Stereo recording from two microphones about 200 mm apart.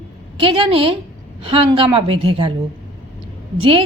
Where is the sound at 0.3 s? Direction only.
25° right (ahead or behind).